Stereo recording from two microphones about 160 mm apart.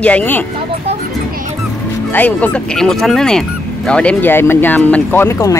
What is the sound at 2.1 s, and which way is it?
Speech, 10° left (ahead or behind).